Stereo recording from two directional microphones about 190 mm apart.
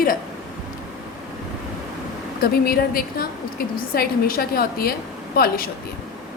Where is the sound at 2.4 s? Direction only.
50° left (ahead or behind).